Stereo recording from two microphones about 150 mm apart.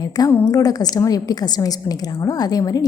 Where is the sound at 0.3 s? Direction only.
25° left (ahead or behind).